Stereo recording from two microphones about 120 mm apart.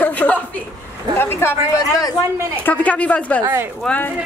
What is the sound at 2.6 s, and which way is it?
Speech, 10° left (ahead or behind).